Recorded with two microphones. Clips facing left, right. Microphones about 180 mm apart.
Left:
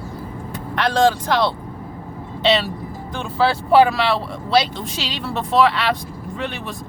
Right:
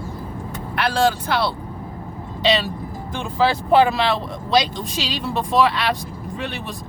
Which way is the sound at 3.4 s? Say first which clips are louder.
Left 2 dB; 20° right (ahead or behind).